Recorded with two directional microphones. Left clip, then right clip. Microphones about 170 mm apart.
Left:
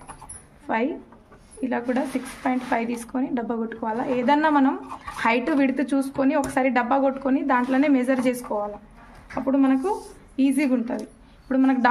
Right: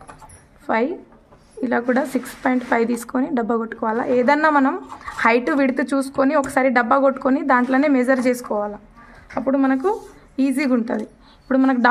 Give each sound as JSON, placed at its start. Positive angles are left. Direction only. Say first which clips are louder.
{"t": 0.7, "sound": "speech", "louder": "right 4 dB", "side_deg": -35}
{"t": 1.6, "sound": "a woman's voice", "louder": "right 6 dB", "side_deg": -45}